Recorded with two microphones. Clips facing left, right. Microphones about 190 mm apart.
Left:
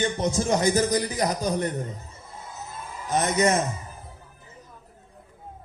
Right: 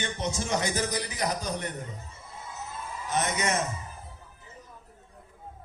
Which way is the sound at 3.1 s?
35° left (ahead or behind).